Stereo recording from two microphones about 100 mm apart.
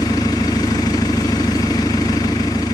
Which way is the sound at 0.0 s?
40° left (ahead or behind).